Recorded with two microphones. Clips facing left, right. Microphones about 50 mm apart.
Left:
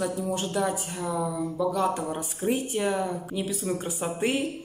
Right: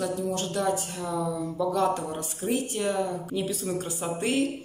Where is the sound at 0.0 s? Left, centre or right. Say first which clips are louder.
Even; centre.